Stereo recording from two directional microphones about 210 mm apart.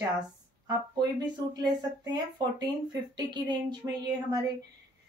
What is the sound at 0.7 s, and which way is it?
Speech, 20° right (ahead or behind).